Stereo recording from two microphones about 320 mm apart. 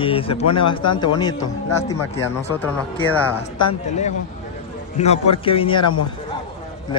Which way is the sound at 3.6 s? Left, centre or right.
Left.